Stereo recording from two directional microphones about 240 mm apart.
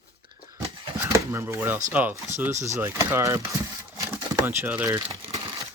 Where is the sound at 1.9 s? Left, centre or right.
Centre.